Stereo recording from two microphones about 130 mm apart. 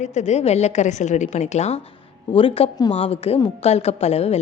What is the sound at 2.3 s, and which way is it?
Speech, 45° left (ahead or behind).